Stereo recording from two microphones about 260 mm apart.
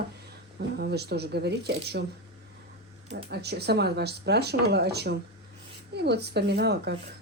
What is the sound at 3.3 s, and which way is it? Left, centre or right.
Speech, right.